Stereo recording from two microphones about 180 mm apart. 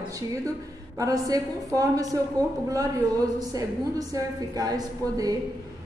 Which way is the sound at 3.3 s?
20° right (ahead or behind).